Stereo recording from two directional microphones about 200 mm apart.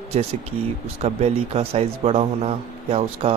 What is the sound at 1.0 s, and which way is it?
A man's voice, 30° right (ahead or behind).